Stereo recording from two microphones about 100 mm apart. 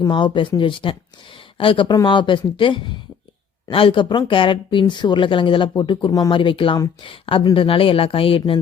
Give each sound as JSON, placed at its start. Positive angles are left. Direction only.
{"t": 0.1, "sound": "speech", "side_deg": 55}
{"t": 6.1, "sound": "speech", "side_deg": 35}
{"t": 6.3, "sound": "speech", "side_deg": 60}